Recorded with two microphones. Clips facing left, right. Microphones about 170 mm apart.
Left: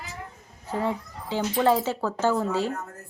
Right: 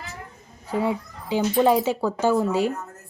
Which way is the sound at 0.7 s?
15° right (ahead or behind).